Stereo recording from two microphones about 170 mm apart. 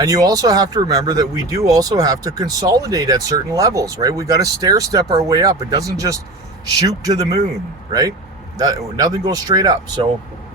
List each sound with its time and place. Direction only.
0.0 s speech: 20° right (ahead or behind)
8.5 s speech: 20° right (ahead or behind)